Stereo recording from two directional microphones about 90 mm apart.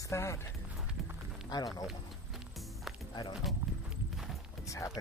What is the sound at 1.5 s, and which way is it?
Speech, 45° left (ahead or behind).